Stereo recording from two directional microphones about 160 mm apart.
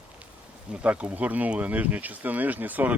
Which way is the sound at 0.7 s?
10° right (ahead or behind).